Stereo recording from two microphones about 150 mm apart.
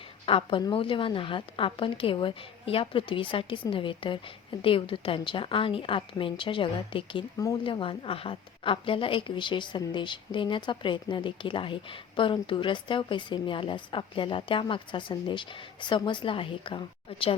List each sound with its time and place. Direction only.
0.3 s speech: 35° left (ahead or behind)
7.6 s speech: 35° left (ahead or behind)